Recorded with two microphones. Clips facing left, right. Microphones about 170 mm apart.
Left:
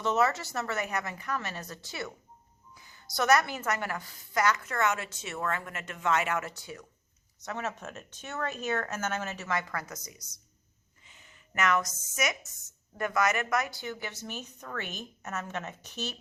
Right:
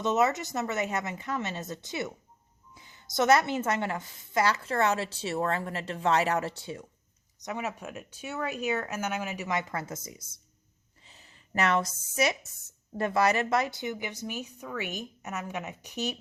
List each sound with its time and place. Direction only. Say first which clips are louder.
0.0 s speech: right 2 dB; 20° right (ahead or behind)
7.4 s speech: right 1 dB; 15° right (ahead or behind)